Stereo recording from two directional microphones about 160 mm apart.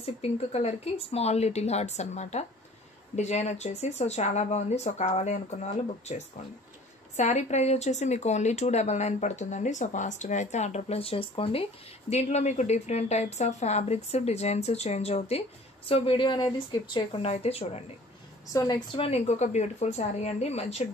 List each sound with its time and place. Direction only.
0.0 s speech: 40° left (ahead or behind)
18.5 s a woman's voice: 20° left (ahead or behind)
18.9 s speech: 40° left (ahead or behind)